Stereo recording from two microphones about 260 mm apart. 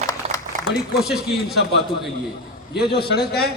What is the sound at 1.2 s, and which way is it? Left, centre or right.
Speech, left.